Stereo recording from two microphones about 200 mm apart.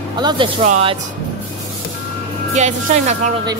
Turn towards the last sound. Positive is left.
turn(degrees=-35)  # may be behind; listen again after turning